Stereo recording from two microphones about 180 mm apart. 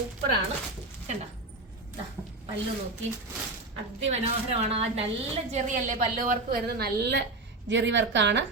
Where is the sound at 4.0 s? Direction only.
35° right (ahead or behind); by 7.2 s 65° right (ahead or behind).